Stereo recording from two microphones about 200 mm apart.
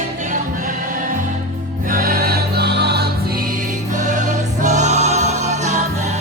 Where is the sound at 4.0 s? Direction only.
40° right (ahead or behind).